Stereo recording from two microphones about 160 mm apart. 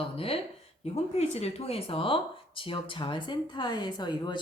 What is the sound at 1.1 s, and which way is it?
Speech, 40° left (ahead or behind).